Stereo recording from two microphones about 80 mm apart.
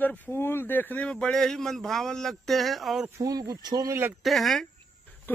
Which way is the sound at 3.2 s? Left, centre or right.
Right.